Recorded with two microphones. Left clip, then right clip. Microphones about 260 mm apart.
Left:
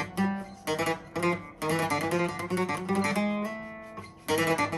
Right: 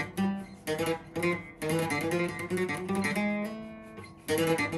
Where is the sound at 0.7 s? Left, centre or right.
Centre.